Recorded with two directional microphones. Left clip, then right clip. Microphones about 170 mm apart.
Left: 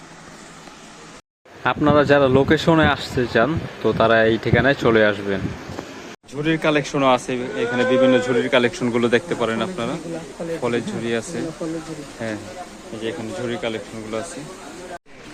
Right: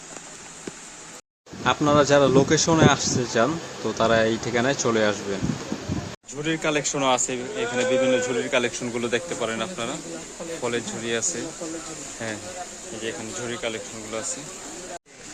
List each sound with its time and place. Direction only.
1.6 s speech: 30° left (ahead or behind)
6.4 s speech: 5° left (ahead or behind)